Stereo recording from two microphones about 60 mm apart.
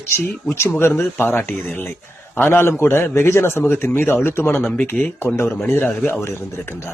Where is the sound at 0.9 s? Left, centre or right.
Left.